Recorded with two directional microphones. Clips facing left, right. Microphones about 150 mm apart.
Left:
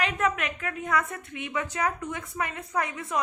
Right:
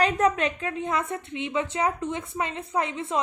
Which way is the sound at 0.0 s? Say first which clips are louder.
Right 5 dB; 35° right (ahead or behind).